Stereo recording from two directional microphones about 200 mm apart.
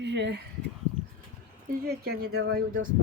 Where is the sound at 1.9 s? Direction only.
50° right (ahead or behind).